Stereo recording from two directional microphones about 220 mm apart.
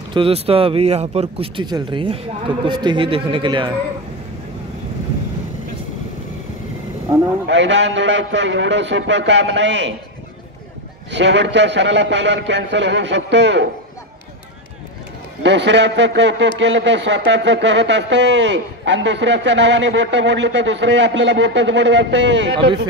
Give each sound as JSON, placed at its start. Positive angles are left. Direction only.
{"t": 0.1, "sound": "speech", "side_deg": -25}
{"t": 7.4, "sound": "a man's voice", "side_deg": -55}
{"t": 11.1, "sound": "speech", "side_deg": -55}
{"t": 15.4, "sound": "speech", "side_deg": -55}